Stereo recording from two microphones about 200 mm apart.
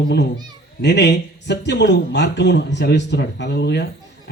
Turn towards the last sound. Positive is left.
turn(degrees=55)  # may be behind; listen again after turning